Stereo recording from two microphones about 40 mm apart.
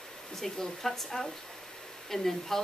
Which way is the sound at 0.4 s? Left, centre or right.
Centre.